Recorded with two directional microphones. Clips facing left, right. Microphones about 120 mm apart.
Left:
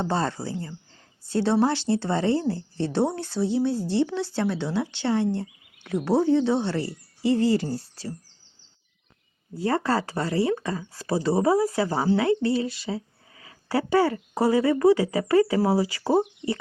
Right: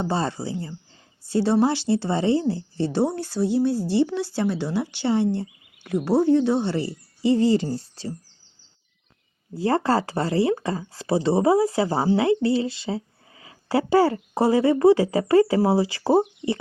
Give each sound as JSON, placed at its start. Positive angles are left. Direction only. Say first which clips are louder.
{"t": 0.0, "sound": "speech", "louder": "right 1 dB", "side_deg": -15}
{"t": 5.9, "sound": "speech", "louder": "right 2 dB", "side_deg": 0}
{"t": 6.7, "sound": "speech", "louder": "right 2 dB", "side_deg": -15}
{"t": 9.6, "sound": "speech", "louder": "right 3 dB", "side_deg": -30}